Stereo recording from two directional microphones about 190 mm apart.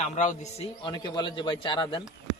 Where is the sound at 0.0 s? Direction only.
40° left (ahead or behind).